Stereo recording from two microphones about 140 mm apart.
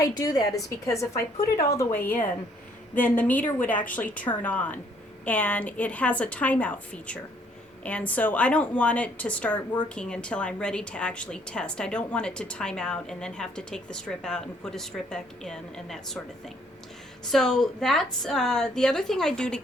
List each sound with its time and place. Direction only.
0.0 s a woman's voice: 25° left (ahead or behind); by 16.2 s 5° left (ahead or behind)
17.2 s a woman's voice: 5° left (ahead or behind)